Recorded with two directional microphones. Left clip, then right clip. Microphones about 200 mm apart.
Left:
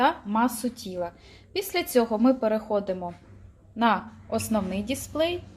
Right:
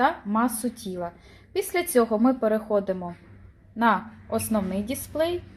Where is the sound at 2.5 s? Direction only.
15° right (ahead or behind).